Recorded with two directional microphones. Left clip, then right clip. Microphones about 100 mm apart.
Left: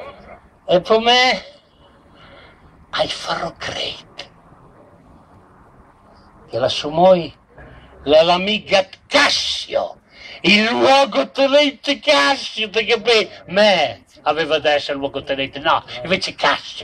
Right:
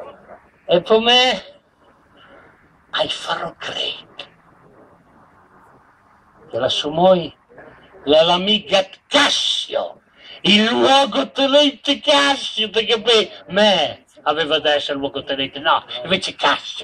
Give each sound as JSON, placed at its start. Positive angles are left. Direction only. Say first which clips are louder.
{"t": 0.7, "sound": "a man's voice", "louder": "even", "side_deg": 25}
{"t": 2.9, "sound": "speech", "louder": "even", "side_deg": 25}
{"t": 6.5, "sound": "a man's voice", "louder": "left 1 dB", "side_deg": 25}